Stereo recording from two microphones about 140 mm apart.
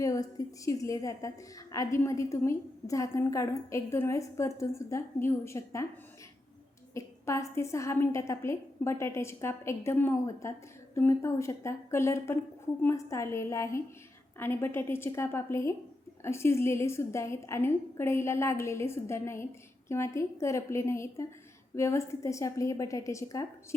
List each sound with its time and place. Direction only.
0.0 s a woman's voice: 25° left (ahead or behind)
6.9 s a woman's voice: 20° left (ahead or behind)